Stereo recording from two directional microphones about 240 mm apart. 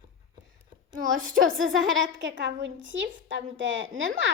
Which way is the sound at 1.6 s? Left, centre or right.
Right.